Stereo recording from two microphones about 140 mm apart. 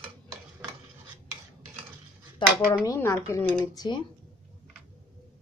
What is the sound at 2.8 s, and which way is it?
Speech, 20° left (ahead or behind).